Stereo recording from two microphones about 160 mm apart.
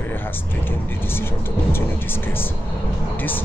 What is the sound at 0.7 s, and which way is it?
Speech, 15° left (ahead or behind).